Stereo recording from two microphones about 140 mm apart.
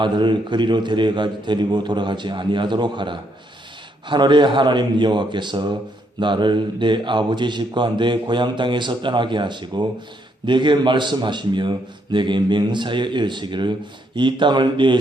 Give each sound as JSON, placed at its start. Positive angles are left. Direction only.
{"t": 0.0, "sound": "a man's voice", "side_deg": -35}